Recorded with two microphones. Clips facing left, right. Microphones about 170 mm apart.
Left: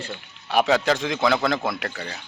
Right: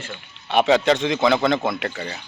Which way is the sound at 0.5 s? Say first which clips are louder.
Right 3 dB; centre (ahead or behind).